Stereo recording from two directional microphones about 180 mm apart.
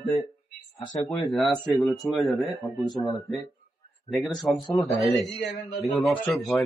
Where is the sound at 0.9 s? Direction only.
40° left (ahead or behind).